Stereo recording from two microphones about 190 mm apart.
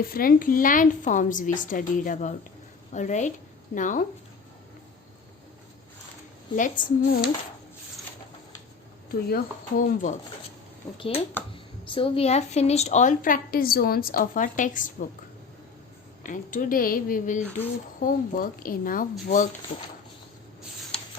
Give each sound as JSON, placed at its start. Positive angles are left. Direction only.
{"t": 0.0, "sound": "a woman's voice", "side_deg": 50}
{"t": 6.6, "sound": "a woman's voice", "side_deg": 45}
{"t": 9.3, "sound": "a woman's voice", "side_deg": 45}
{"t": 10.9, "sound": "a woman's voice", "side_deg": 30}
{"t": 16.2, "sound": "a woman's voice", "side_deg": 45}